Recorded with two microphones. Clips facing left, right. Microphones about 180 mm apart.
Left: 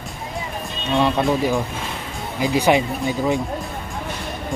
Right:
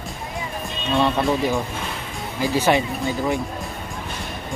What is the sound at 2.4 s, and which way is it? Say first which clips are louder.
Speech: left 2 dB; 15° left (ahead or behind).